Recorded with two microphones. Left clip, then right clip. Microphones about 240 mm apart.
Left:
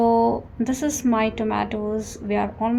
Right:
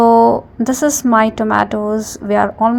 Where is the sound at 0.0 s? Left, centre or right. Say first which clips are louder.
Right 9 dB; right.